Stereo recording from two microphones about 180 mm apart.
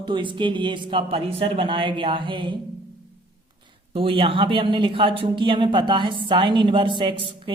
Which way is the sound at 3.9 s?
30° right (ahead or behind).